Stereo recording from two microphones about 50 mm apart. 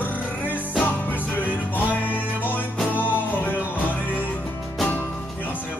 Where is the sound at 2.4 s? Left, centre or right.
Left.